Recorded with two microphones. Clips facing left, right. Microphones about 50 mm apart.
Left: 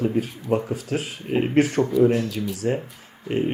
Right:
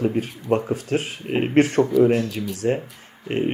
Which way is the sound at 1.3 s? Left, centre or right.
Right.